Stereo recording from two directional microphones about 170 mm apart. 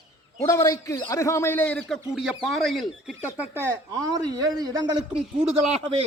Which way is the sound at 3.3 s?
10° right (ahead or behind).